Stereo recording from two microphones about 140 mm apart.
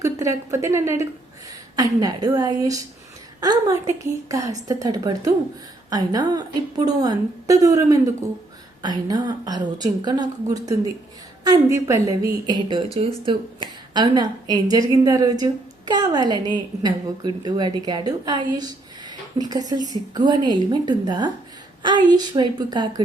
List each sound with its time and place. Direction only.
0.0 s a woman's voice: 20° right (ahead or behind)